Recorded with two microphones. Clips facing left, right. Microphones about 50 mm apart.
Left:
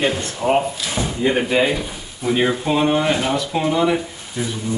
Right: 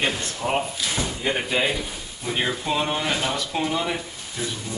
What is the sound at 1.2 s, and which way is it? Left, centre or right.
Speech, centre.